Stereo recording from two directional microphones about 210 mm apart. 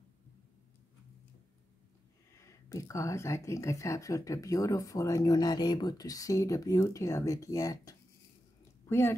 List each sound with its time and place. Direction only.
2.3 s a woman's voice: 15° left (ahead or behind)